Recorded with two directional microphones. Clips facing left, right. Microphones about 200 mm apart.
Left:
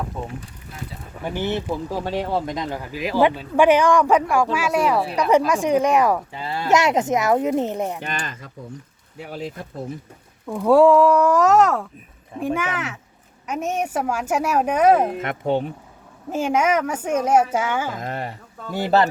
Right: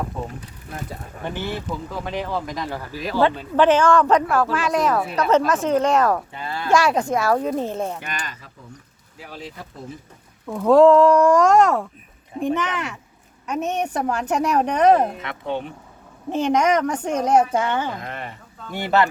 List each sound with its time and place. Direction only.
1.2 s speech: 15° left (ahead or behind)
1.7 s speech: 30° left (ahead or behind)
9.1 s speech: 50° left (ahead or behind)
10.4 s speech: 10° left (ahead or behind)
15.2 s speech: 45° left (ahead or behind)
16.3 s speech: 5° left (ahead or behind)
17.9 s speech: 40° left (ahead or behind)